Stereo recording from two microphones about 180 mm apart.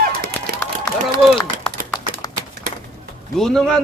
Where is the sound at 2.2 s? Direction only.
20° left (ahead or behind).